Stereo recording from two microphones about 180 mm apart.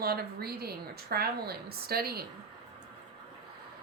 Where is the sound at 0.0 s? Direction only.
60° right (ahead or behind).